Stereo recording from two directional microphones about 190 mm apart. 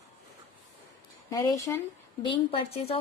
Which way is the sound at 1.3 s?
20° left (ahead or behind).